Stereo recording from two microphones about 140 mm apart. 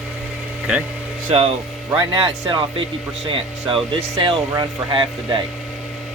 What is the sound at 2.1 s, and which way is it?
Speech, 35° right (ahead or behind).